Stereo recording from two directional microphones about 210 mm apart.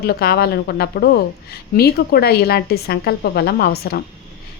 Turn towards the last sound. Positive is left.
turn(degrees=50)  # may be behind; listen again after turning